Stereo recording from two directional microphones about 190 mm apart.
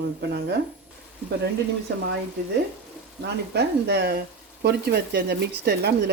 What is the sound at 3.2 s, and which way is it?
Speech, 60° right (ahead or behind).